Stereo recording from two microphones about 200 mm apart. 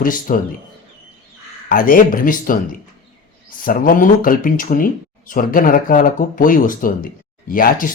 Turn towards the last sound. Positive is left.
turn(degrees=45)  # may be behind; listen again after turning